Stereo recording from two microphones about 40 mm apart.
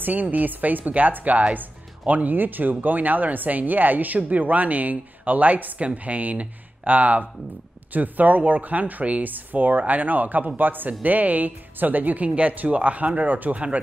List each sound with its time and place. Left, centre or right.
0.0 s speech: right